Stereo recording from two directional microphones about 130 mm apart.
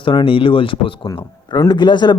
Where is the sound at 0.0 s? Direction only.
40° left (ahead or behind).